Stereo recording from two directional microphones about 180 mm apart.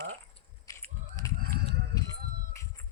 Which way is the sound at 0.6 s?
15° left (ahead or behind).